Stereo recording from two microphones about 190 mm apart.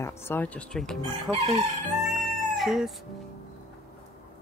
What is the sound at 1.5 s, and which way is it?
Crowing, 35° right (ahead or behind).